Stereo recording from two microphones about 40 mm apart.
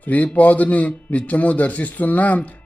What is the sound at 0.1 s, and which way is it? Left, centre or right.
Speech, left.